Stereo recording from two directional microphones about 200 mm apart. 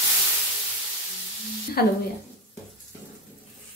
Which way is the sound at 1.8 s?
50° left (ahead or behind).